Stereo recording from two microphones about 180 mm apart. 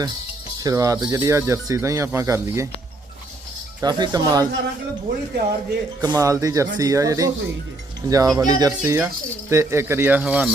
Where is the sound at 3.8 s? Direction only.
25° right (ahead or behind).